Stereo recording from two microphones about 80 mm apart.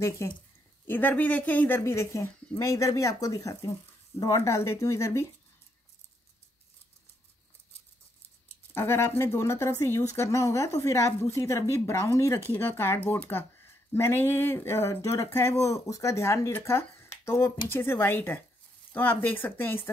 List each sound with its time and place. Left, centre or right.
0.2 s speech: left
0.8 s speech: left
1.8 s speech: left
8.7 s speech: left